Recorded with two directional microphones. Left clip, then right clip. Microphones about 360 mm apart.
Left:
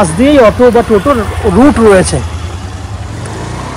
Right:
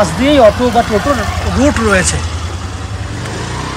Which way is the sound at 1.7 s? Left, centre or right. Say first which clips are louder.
Left 6 dB; centre.